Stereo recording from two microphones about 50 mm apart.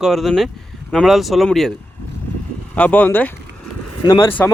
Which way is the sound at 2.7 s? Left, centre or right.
Left.